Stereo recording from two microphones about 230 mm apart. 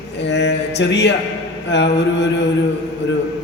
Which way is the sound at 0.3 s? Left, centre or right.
Left.